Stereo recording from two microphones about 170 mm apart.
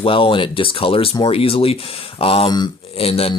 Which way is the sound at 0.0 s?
30° left (ahead or behind).